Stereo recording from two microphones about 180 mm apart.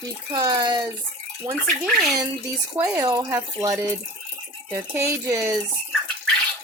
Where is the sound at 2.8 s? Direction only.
15° right (ahead or behind).